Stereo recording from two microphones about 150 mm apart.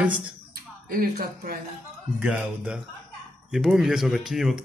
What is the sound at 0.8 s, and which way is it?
Speech, 75° right (ahead or behind).